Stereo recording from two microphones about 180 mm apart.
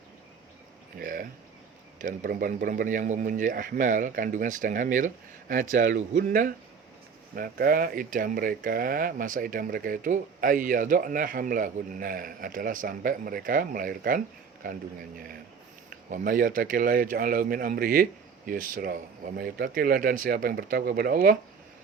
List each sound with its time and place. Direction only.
0.9 s speech: 50° right (ahead or behind)
7.3 s speech: 55° right (ahead or behind)